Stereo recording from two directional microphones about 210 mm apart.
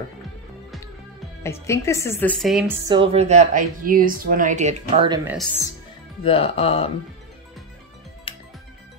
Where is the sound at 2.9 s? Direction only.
25° right (ahead or behind).